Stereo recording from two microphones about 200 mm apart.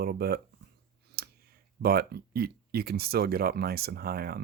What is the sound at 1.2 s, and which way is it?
Clicking, 50° right (ahead or behind).